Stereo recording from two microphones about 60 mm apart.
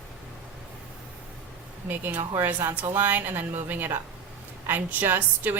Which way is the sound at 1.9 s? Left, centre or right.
Right.